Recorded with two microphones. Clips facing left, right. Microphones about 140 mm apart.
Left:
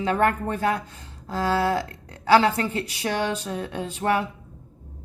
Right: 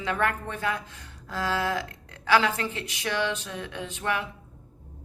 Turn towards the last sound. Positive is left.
turn(degrees=40)  # may be behind; listen again after turning